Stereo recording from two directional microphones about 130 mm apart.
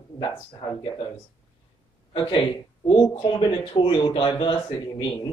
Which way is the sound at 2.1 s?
35° left (ahead or behind).